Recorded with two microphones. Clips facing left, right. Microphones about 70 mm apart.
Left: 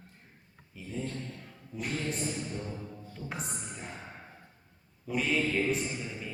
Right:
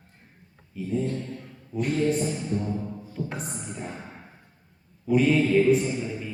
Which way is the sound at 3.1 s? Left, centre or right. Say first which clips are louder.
Right 7 dB; centre.